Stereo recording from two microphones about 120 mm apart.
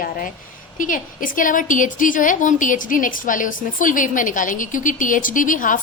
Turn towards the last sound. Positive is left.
turn(degrees=90)